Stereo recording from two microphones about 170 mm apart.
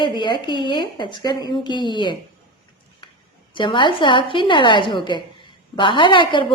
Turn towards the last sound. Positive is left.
turn(degrees=30)  # may be behind; listen again after turning